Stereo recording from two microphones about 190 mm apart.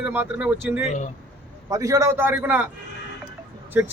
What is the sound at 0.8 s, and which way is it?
Speech, 40° left (ahead or behind).